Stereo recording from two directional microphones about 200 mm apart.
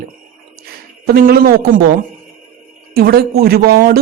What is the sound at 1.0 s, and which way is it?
Speech, 50° right (ahead or behind).